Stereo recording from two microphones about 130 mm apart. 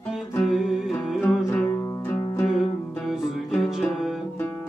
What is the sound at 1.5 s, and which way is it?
Music, 25° left (ahead or behind).